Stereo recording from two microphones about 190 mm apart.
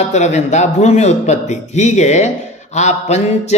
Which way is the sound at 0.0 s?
35° left (ahead or behind).